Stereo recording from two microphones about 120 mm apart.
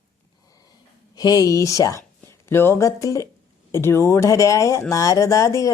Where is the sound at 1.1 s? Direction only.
30° left (ahead or behind).